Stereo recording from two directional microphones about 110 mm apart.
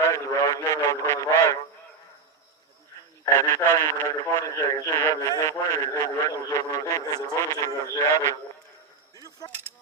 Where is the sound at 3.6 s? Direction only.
20° left (ahead or behind).